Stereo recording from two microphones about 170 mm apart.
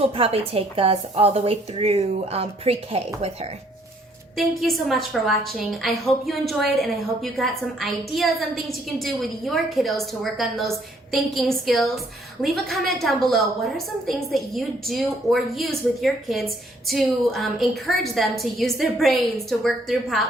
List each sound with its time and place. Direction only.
0.0 s a woman's voice: 35° right (ahead or behind)
4.4 s a woman's voice: centre (ahead or behind)